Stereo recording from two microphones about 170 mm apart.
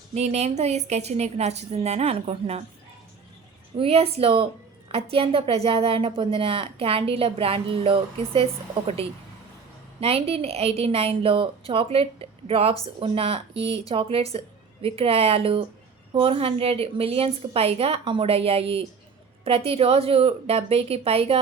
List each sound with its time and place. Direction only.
0.1 s a woman's voice: 40° right (ahead or behind)
3.8 s a woman's voice: 35° right (ahead or behind)